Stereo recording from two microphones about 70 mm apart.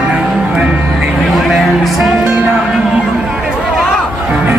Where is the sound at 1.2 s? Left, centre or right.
Centre.